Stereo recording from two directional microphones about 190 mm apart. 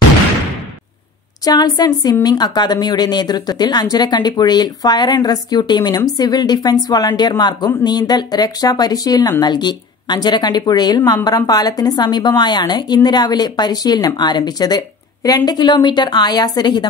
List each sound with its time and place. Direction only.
1.4 s a woman's voice: 20° left (ahead or behind)